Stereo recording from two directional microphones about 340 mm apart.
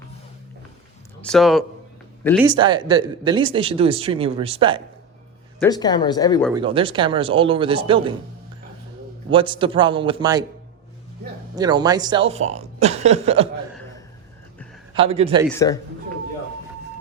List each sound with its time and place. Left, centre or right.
1.2 s speech: centre
2.4 s speech: centre
5.5 s speech: centre
6.5 s speech: centre
9.3 s speech: centre
11.5 s speech: centre
14.9 s speech: centre
15.4 s speech: centre